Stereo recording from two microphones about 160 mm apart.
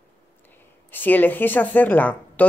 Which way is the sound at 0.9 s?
10° left (ahead or behind).